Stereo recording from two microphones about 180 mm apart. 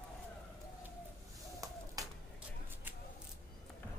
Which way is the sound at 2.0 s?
20° right (ahead or behind).